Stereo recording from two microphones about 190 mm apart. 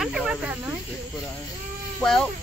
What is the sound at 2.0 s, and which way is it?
Speech, 5° left (ahead or behind).